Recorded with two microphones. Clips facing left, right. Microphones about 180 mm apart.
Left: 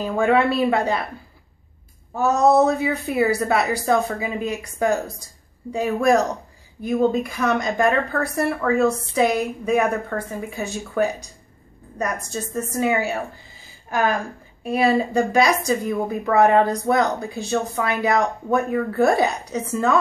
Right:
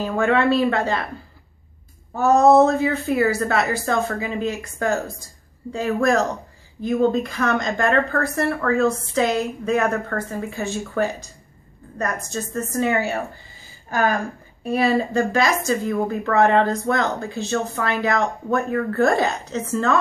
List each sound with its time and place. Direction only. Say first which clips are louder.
0.0 s speech: left 1 dB; 10° left (ahead or behind)
2.1 s speech: right 3 dB; 10° left (ahead or behind)
14.7 s speech: left 1 dB; 10° left (ahead or behind)